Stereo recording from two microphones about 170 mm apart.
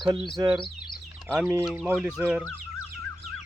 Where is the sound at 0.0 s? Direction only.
30° right (ahead or behind).